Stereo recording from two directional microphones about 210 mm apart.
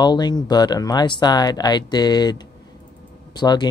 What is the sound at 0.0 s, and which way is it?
Speech, 20° left (ahead or behind).